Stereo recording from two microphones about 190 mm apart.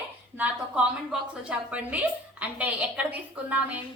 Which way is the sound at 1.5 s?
5° right (ahead or behind).